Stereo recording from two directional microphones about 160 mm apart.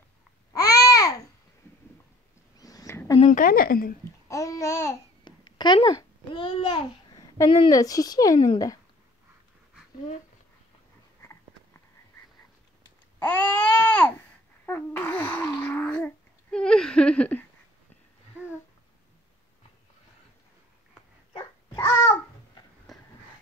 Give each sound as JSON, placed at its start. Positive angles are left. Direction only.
{"t": 0.5, "sound": "babbling", "side_deg": 20}
{"t": 2.6, "sound": "a sound", "side_deg": 20}
{"t": 3.3, "sound": "a woman's voice", "side_deg": 60}
{"t": 4.3, "sound": "babbling", "side_deg": 20}
{"t": 5.4, "sound": "a child's voice", "side_deg": 30}
{"t": 11.1, "sound": "a sound", "side_deg": 15}
{"t": 13.2, "sound": "babbling", "side_deg": 15}
{"t": 21.3, "sound": "babbling", "side_deg": 25}